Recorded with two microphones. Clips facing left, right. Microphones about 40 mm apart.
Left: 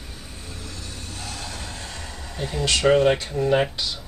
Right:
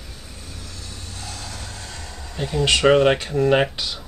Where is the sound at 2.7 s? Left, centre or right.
Right.